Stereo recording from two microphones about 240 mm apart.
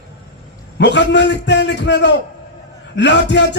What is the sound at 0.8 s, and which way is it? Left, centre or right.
A man's voice, left.